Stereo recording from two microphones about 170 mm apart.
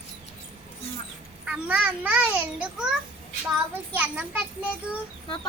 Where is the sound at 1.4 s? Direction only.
10° right (ahead or behind).